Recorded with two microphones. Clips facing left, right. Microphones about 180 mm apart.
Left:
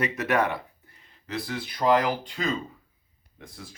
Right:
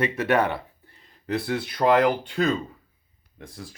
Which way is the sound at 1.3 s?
65° right (ahead or behind).